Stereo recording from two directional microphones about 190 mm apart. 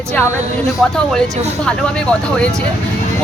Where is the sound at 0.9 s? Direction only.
5° left (ahead or behind).